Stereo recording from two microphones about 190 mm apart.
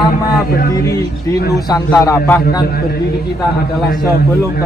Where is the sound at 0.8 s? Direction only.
15° left (ahead or behind).